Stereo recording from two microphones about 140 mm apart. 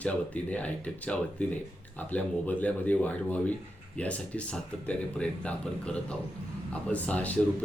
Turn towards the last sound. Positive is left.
turn(degrees=10)  # may be behind; listen again after turning